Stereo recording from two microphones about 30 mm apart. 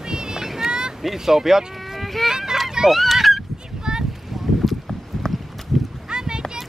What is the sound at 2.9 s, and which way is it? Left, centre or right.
Goose, centre.